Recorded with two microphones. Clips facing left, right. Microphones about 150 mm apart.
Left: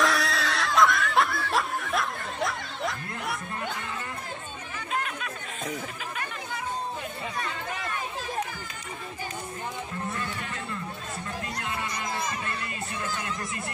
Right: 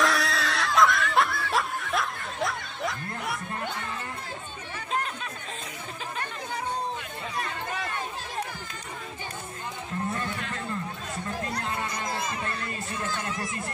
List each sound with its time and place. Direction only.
0.0 s snicker: centre (ahead or behind)
4.7 s chatter: 30° right (ahead or behind)
11.5 s music: 30° right (ahead or behind)